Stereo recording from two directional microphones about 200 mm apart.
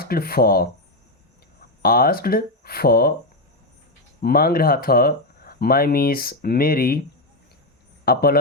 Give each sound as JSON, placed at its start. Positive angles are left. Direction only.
{"t": 0.0, "sound": "speech", "side_deg": 50}
{"t": 1.8, "sound": "speech", "side_deg": 50}
{"t": 4.2, "sound": "speech", "side_deg": 50}
{"t": 8.0, "sound": "speech", "side_deg": 50}